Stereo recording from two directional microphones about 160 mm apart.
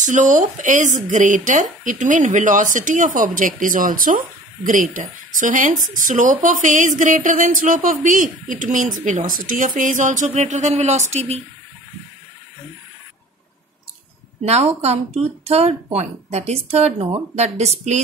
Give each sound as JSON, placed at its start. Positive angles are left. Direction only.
{"t": 0.0, "sound": "speech", "side_deg": -50}
{"t": 14.4, "sound": "speech", "side_deg": -40}